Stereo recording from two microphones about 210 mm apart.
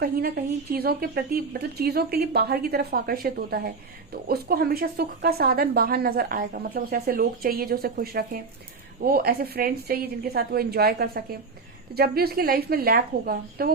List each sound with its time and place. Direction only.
0.0 s speech: 45° right (ahead or behind)